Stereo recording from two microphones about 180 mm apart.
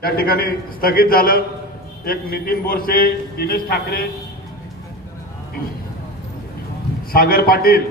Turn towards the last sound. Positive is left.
turn(degrees=55)  # may be behind; listen again after turning